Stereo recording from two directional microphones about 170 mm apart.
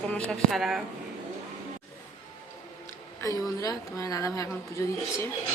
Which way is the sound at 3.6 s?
20° left (ahead or behind).